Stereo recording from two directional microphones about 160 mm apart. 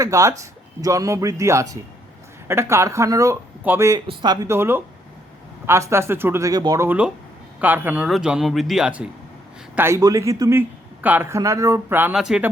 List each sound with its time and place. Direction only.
0.0 s a man's voice: 20° right (ahead or behind)
6.8 s speech: 10° right (ahead or behind)